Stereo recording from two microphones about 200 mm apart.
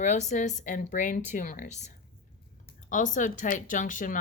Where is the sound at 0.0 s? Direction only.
35° left (ahead or behind).